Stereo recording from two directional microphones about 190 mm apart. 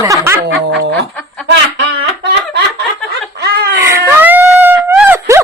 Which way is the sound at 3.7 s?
15° right (ahead or behind).